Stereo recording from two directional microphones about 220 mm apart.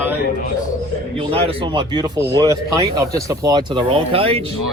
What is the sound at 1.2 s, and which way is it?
Speech, 25° right (ahead or behind).